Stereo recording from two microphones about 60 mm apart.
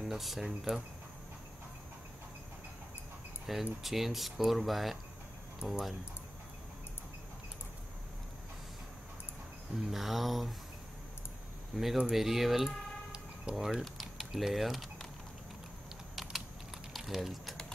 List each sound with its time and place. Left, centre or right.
0.0 s speech: centre
0.5 s speech: centre
3.4 s speech: centre
9.8 s speech: centre
11.7 s speech: centre
13.1 s a sound: centre
13.7 s speech: centre
16.9 s typing: centre